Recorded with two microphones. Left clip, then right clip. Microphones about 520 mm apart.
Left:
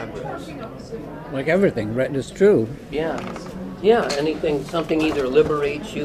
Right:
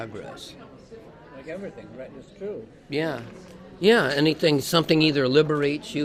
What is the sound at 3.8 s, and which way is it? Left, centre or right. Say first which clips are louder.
Speech: left 2 dB; right.